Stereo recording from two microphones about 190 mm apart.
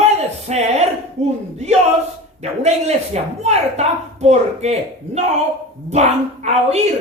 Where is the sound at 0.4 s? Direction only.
35° right (ahead or behind).